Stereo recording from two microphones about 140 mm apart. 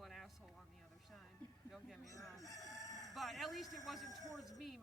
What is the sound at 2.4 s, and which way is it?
Crowing, 25° left (ahead or behind).